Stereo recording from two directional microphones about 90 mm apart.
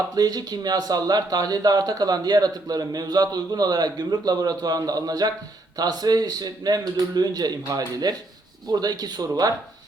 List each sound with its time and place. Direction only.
0.2 s speech: 45° right (ahead or behind)